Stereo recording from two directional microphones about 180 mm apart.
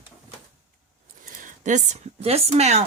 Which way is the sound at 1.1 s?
50° right (ahead or behind).